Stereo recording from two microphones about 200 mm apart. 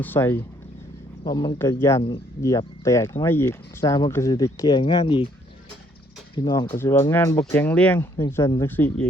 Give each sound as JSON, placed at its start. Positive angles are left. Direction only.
{"t": 0.0, "sound": "speech", "side_deg": 10}
{"t": 6.3, "sound": "speech", "side_deg": 20}